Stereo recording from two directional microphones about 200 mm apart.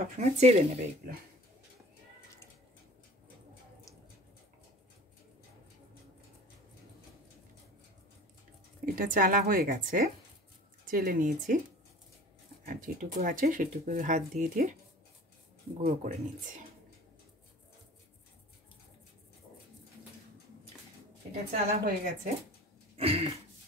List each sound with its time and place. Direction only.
0.2 s speech: 35° right (ahead or behind)
8.8 s speech: 45° right (ahead or behind)
12.6 s speech: 45° right (ahead or behind)
15.8 s speech: 40° right (ahead or behind)
21.5 s speech: 40° right (ahead or behind)
22.9 s throat clearing: 30° right (ahead or behind)